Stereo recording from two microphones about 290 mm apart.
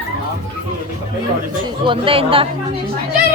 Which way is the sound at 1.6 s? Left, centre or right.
Centre.